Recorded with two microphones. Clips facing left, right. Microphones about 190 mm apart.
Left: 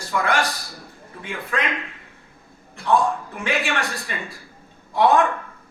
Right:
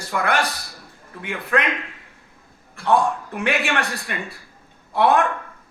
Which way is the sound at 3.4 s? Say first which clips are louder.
Right 1 dB; 65° right (ahead or behind).